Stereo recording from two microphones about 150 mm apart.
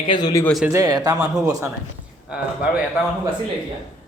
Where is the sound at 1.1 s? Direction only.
5° right (ahead or behind).